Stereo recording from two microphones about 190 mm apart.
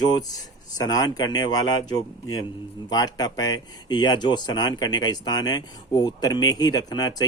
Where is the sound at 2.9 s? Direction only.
20° left (ahead or behind).